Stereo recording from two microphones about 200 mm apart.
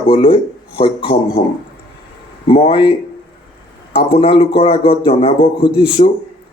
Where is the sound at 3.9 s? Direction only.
30° left (ahead or behind).